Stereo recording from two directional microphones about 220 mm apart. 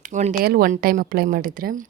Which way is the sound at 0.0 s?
35° right (ahead or behind).